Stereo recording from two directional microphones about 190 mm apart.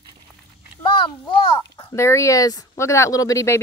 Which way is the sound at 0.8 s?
25° left (ahead or behind).